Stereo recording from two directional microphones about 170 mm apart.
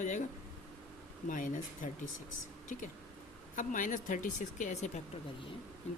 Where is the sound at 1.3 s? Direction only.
50° left (ahead or behind).